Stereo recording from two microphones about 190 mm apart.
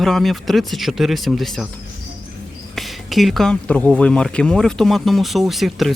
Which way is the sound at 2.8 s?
Centre (ahead or behind).